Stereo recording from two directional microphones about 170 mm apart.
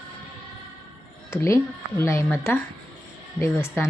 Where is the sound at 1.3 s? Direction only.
15° left (ahead or behind).